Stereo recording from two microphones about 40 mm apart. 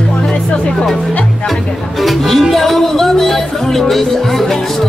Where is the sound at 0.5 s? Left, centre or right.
Left.